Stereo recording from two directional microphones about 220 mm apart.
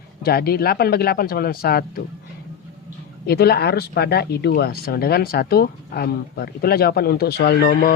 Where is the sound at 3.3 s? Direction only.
45° left (ahead or behind).